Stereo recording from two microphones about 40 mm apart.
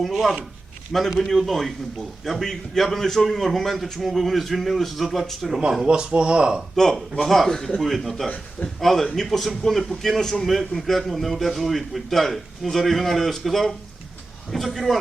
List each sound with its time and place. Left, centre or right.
0.0 s a man's voice: centre
5.8 s speech: right
6.7 s a man's voice: centre